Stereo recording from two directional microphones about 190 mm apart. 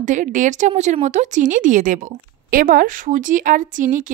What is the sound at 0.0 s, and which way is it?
A woman's voice, 40° right (ahead or behind).